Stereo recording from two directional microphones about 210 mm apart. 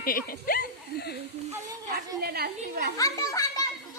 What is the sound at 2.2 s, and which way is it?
Speech, 50° right (ahead or behind).